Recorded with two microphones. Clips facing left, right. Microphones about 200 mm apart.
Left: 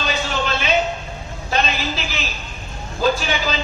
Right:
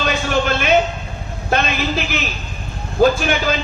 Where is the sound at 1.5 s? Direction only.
55° right (ahead or behind).